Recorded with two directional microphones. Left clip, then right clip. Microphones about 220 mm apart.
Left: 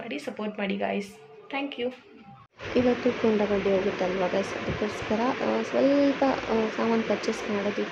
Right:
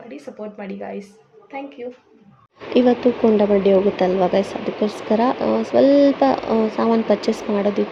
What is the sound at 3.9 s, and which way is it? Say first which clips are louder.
Speech: right 9 dB; 25° right (ahead or behind).